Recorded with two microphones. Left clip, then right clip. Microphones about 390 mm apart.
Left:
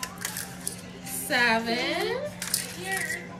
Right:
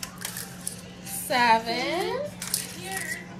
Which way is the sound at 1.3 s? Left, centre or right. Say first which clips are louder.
Right 2 dB; centre.